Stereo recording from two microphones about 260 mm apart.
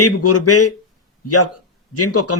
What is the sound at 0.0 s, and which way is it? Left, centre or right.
Speech, left.